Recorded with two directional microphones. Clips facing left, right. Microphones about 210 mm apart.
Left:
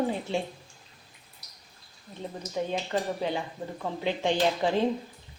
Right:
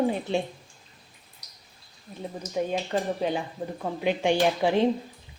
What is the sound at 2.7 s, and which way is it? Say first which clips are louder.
A woman's voice: right 2 dB; 15° right (ahead or behind).